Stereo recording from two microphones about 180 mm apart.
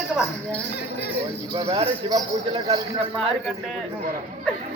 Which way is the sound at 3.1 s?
Centre (ahead or behind).